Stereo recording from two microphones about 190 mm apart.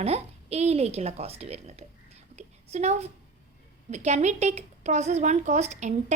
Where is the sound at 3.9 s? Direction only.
35° right (ahead or behind).